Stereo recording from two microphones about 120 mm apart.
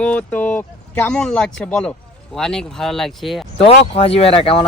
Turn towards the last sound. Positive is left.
turn(degrees=50)  # may be behind; listen again after turning